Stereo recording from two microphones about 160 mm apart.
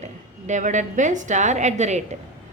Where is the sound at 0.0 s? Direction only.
50° right (ahead or behind).